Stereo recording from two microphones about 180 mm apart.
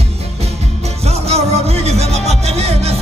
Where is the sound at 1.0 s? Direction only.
35° right (ahead or behind).